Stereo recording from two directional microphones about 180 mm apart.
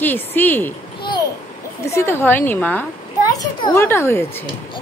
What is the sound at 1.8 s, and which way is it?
Speech, 15° left (ahead or behind).